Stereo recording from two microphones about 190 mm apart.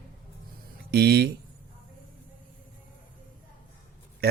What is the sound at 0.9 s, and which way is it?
Speech, 55° right (ahead or behind).